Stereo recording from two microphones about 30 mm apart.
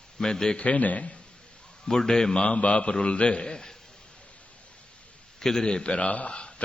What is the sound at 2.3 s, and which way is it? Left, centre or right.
Speech, left.